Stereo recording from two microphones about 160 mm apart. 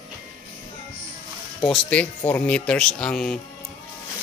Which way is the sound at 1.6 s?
5° left (ahead or behind).